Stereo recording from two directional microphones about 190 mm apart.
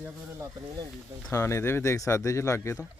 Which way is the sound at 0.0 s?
10° right (ahead or behind).